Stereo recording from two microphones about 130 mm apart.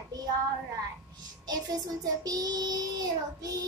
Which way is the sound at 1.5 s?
30° right (ahead or behind).